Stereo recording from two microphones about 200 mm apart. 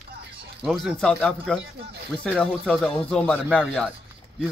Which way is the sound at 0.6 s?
Centre (ahead or behind).